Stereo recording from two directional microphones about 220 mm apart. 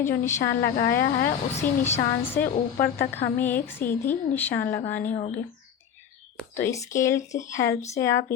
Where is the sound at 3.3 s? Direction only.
10° left (ahead or behind).